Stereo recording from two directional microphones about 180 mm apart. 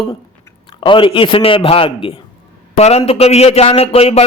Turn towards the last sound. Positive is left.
turn(degrees=35)  # may be behind; listen again after turning